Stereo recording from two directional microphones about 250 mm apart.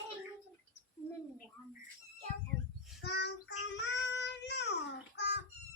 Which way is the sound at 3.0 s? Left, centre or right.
Left.